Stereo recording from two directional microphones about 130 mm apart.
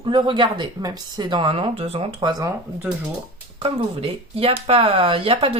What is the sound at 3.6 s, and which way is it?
Speech, 50° right (ahead or behind).